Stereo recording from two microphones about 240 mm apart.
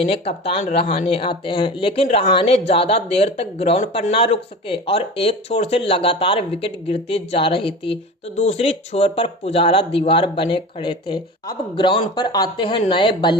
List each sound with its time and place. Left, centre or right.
0.0 s speech: left